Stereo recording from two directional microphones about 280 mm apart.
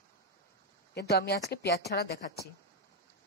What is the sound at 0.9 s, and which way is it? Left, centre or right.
Speech, left.